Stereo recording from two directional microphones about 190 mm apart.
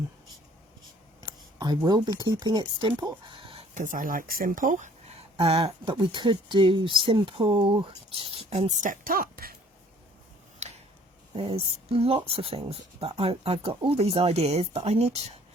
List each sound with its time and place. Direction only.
1.2 s speech: 20° right (ahead or behind)
3.8 s speech: 45° right (ahead or behind)
5.4 s speech: 30° right (ahead or behind); by 9.6 s 50° right (ahead or behind)
11.3 s speech: 30° right (ahead or behind)